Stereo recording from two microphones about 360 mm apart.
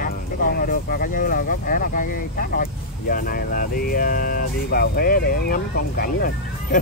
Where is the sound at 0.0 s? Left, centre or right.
Left.